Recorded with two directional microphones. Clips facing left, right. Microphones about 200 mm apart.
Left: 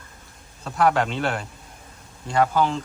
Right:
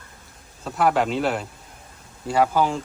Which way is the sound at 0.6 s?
Centre (ahead or behind).